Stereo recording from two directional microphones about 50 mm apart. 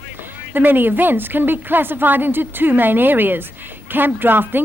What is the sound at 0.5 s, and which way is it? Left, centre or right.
A woman's voice, right.